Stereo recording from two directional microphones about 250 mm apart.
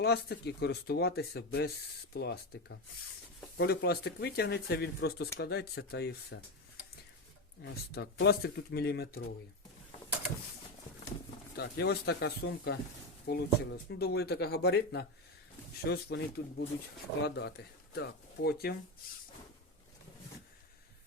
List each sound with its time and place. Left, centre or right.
0.0 s speech: left
7.6 s speech: left
11.5 s speech: left